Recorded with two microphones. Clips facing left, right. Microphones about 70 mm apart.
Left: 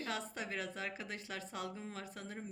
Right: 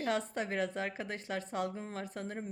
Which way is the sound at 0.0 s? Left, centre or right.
Right.